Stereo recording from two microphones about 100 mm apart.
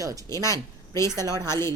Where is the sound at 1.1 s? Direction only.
40° right (ahead or behind).